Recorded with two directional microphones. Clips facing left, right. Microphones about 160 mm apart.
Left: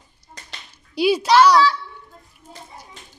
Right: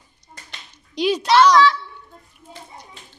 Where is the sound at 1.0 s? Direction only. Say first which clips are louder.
Left 1 dB; 10° left (ahead or behind).